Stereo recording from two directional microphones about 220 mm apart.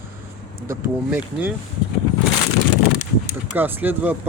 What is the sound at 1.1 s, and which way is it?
Speech, 5° right (ahead or behind).